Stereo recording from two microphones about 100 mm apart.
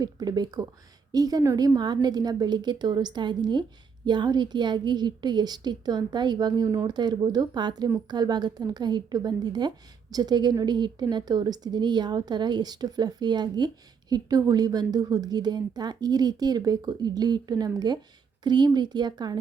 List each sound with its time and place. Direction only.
0.0 s a woman's voice: 40° right (ahead or behind)